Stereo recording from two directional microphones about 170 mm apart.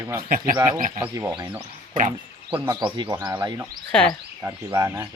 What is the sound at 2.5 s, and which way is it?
Speech, 25° right (ahead or behind).